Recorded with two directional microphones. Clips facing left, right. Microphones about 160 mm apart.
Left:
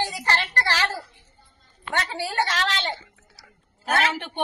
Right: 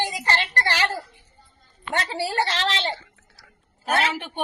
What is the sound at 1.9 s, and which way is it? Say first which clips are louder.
Speech: right 1 dB; 30° right (ahead or behind).